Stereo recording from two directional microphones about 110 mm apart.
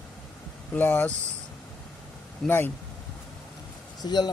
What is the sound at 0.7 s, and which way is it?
Speech, 15° left (ahead or behind).